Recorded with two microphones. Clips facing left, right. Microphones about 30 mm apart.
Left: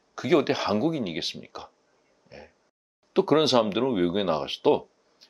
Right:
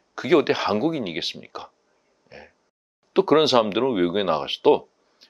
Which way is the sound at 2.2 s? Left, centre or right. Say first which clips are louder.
Right 2 dB; centre.